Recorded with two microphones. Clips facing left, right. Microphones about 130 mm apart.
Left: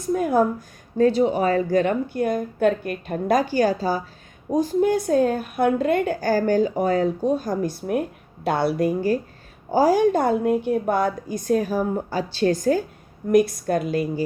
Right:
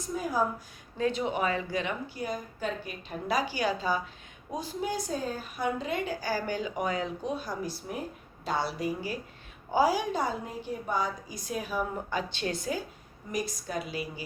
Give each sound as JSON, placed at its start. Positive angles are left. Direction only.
{"t": 0.1, "sound": "a woman's voice", "side_deg": 60}
{"t": 0.9, "sound": "a woman's voice", "side_deg": 35}
{"t": 4.4, "sound": "a woman's voice", "side_deg": 50}
{"t": 13.3, "sound": "a woman's voice", "side_deg": 60}